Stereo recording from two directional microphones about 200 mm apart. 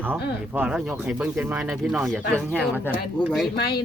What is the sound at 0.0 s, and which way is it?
Speech, 10° right (ahead or behind).